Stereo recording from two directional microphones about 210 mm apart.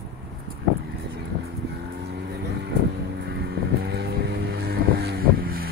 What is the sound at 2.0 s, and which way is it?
Vehicle, 50° right (ahead or behind).